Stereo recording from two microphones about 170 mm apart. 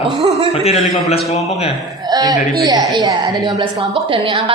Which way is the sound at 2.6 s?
20° right (ahead or behind).